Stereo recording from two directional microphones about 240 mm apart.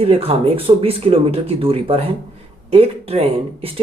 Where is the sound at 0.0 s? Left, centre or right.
Right.